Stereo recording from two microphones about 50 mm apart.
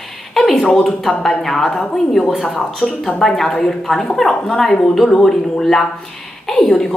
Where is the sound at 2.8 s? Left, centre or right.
Centre.